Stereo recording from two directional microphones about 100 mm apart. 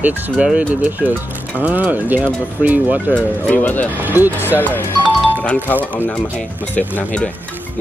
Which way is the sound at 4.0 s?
20° right (ahead or behind).